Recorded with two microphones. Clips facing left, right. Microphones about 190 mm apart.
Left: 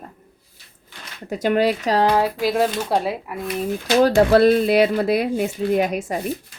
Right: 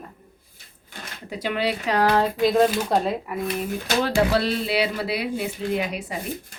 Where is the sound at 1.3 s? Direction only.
45° left (ahead or behind).